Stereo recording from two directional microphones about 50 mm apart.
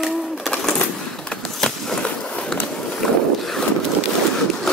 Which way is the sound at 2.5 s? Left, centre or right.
Centre.